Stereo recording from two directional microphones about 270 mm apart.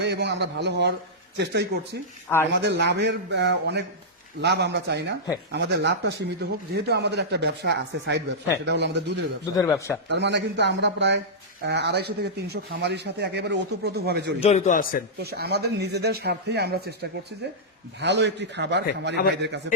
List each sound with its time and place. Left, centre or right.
0.0 s a man's voice: right
9.6 s speech: centre
10.1 s a man's voice: right
14.4 s a man's voice: left
15.2 s a man's voice: right
19.2 s a man's voice: left